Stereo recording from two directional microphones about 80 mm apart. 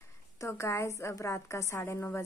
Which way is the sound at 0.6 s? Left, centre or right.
Left.